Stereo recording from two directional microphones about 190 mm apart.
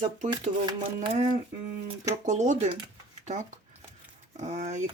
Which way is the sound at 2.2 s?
40° right (ahead or behind).